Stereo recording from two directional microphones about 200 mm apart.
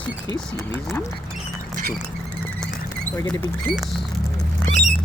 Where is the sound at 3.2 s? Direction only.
15° left (ahead or behind).